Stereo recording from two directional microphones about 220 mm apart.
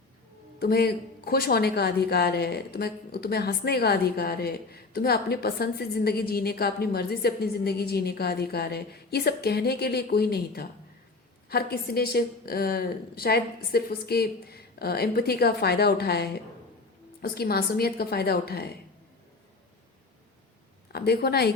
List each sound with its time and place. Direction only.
0.6 s a woman's voice: 45° left (ahead or behind)
20.9 s a woman's voice: 45° left (ahead or behind)